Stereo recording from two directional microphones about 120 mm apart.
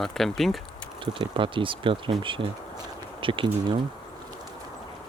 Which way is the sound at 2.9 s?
45° right (ahead or behind).